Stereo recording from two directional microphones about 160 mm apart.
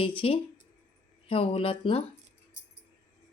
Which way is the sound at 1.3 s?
35° left (ahead or behind).